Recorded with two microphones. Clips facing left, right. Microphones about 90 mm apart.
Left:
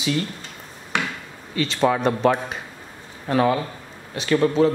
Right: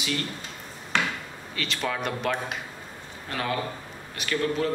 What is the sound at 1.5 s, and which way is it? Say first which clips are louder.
A man's voice: left 10 dB; 30° left (ahead or behind).